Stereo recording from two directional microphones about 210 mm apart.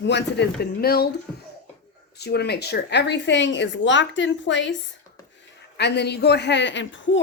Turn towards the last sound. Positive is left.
turn(degrees=60)  # may be behind; listen again after turning